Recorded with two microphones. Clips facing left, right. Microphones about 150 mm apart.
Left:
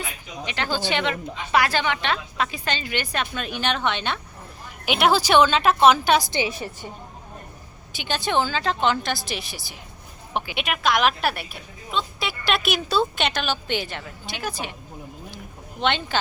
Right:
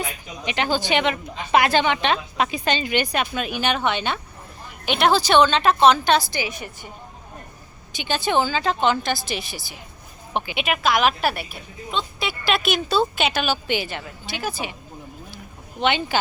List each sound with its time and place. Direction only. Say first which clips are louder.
0.0 s a woman's voice: right 3 dB; 15° right (ahead or behind); by 6.3 s 10° left (ahead or behind)
6.3 s a woman's voice: left 3 dB; 30° left (ahead or behind)
7.9 s a woman's voice: right 2 dB; centre (ahead or behind)
15.8 s a woman's voice: right 2 dB; 5° right (ahead or behind)